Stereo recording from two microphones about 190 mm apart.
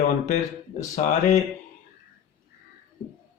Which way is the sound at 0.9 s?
40° left (ahead or behind).